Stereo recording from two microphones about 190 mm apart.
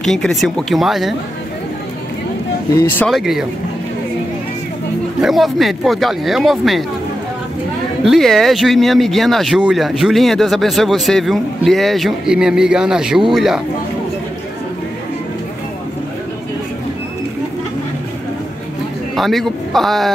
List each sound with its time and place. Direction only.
0.0 s speech: centre (ahead or behind)
2.7 s speech: 15° left (ahead or behind)
3.1 s speech: centre (ahead or behind)
5.2 s speech: centre (ahead or behind)
8.0 s speech: centre (ahead or behind)
19.1 s a man's voice: centre (ahead or behind)